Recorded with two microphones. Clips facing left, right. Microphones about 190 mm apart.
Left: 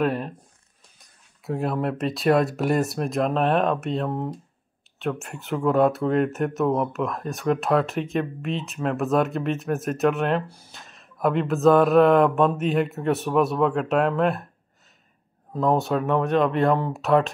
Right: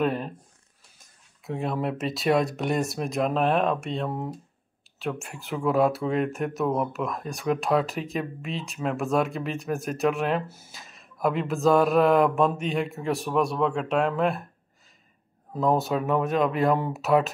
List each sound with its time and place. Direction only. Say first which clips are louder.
0.0 s speech: left 2 dB; centre (ahead or behind)
1.4 s speech: left 3 dB; centre (ahead or behind)
10.4 s speech: even; 45° right (ahead or behind)
10.7 s speech: left 1 dB; centre (ahead or behind)
15.5 s speech: left 2 dB; centre (ahead or behind)